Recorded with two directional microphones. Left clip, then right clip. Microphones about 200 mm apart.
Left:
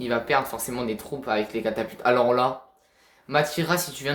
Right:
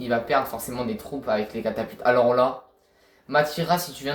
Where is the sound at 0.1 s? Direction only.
30° left (ahead or behind).